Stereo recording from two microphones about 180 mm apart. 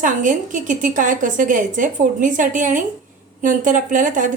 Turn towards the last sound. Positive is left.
turn(degrees=-45)  # may be behind; listen again after turning